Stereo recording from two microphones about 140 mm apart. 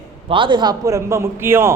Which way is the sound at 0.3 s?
35° right (ahead or behind).